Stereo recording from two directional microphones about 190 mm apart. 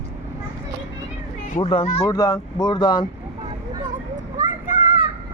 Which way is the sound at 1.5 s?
30° left (ahead or behind).